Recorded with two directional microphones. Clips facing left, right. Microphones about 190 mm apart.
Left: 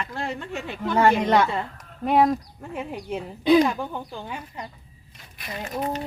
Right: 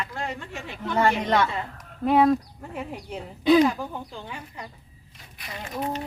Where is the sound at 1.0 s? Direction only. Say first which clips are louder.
Left 3 dB; 15° left (ahead or behind).